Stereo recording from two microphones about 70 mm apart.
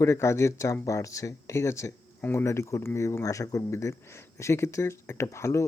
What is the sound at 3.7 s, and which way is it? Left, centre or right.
Speech, left.